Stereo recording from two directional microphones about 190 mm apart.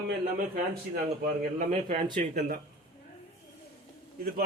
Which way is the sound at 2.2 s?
35° right (ahead or behind).